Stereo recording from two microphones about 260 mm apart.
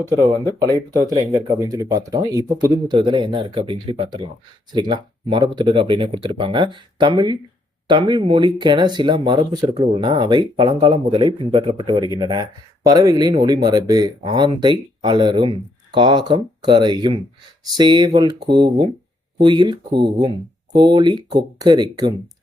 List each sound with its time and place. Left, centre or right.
0.0 s speech: centre